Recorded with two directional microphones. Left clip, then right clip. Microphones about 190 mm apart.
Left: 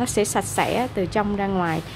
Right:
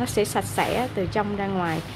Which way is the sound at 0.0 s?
20° left (ahead or behind).